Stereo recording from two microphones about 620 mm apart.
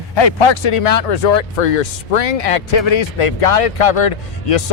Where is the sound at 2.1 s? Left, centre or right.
Left.